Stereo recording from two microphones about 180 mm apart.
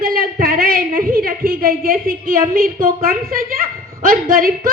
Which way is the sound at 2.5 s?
50° right (ahead or behind).